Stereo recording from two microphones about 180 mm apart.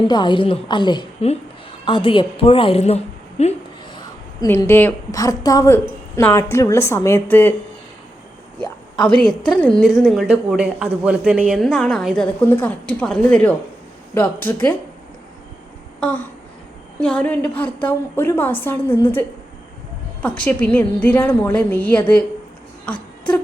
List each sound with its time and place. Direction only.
0.1 s a woman's voice: 25° left (ahead or behind)
3.9 s a woman's voice: 20° left (ahead or behind)
9.0 s a woman's voice: 25° left (ahead or behind)
9.6 s a woman's voice: 5° left (ahead or behind)
16.0 s a sound: 5° left (ahead or behind)
17.0 s a woman's voice: 10° left (ahead or behind)
20.2 s a woman's voice: 10° left (ahead or behind)